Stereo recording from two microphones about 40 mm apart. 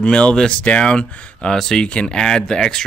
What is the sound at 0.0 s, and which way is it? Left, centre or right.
Speech, left.